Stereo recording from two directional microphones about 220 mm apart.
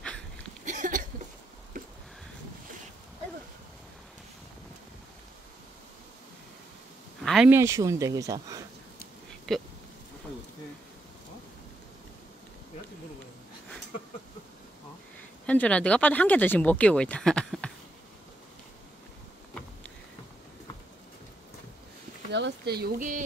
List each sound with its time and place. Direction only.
0.7 s hiccup: 35° right (ahead or behind)
7.2 s speech: 5° right (ahead or behind)
9.5 s a sound: centre (ahead or behind)
15.4 s speech: 5° left (ahead or behind)
22.3 s speech: 50° right (ahead or behind)